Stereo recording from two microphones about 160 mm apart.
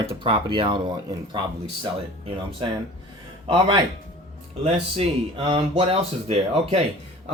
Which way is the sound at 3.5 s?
30° right (ahead or behind).